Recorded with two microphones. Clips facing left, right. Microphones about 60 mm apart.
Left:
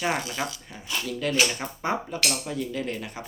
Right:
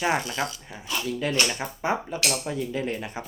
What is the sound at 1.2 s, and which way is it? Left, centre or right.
Speech, right.